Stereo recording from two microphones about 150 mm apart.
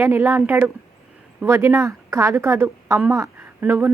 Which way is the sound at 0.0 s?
15° right (ahead or behind).